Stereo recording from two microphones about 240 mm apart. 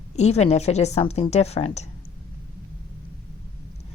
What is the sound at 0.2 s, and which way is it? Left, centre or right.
A woman's voice, left.